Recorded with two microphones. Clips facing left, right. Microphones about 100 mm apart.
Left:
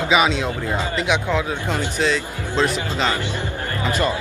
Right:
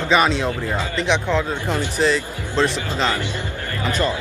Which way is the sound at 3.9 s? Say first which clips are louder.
Even; 20° left (ahead or behind).